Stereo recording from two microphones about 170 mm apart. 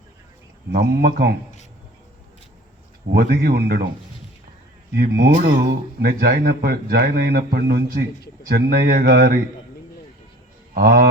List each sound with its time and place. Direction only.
0.7 s a man's voice: 60° right (ahead or behind)
3.1 s a man's voice: 65° right (ahead or behind)
4.9 s a man's voice: 70° right (ahead or behind)
10.8 s a man's voice: 60° right (ahead or behind)